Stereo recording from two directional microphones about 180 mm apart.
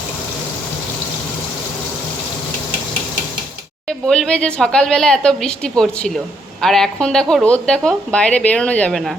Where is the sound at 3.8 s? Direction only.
Centre (ahead or behind).